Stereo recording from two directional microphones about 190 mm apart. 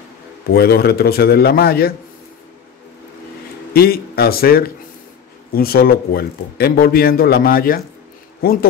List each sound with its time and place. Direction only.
0.5 s a man's voice: 55° left (ahead or behind)
3.7 s speech: 55° left (ahead or behind)